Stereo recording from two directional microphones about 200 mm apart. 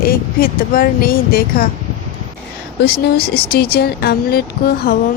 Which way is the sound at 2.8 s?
50° left (ahead or behind).